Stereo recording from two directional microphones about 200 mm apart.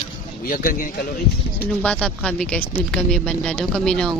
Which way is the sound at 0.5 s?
45° left (ahead or behind).